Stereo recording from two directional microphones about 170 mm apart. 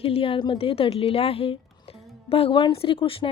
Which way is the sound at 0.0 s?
35° left (ahead or behind).